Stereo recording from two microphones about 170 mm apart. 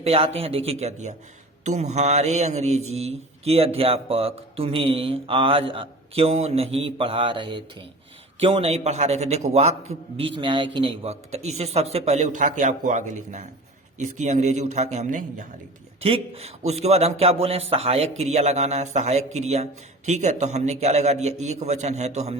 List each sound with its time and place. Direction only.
0.0 s mantra: 35° right (ahead or behind)
14.0 s a man's voice: 45° right (ahead or behind)
16.0 s mantra: 35° right (ahead or behind)